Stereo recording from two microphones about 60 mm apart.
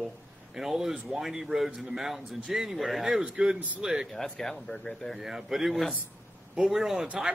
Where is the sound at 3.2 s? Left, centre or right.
Centre.